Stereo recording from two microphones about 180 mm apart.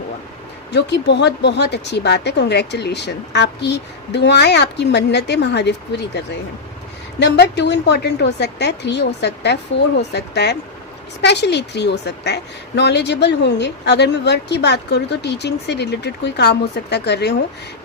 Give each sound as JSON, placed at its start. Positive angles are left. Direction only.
{"t": 0.7, "sound": "a woman's voice", "side_deg": 75}
{"t": 7.2, "sound": "a woman's voice", "side_deg": 75}